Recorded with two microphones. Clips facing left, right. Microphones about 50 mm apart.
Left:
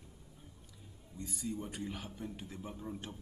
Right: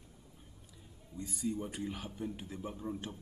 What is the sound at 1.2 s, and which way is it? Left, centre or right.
A man's voice, centre.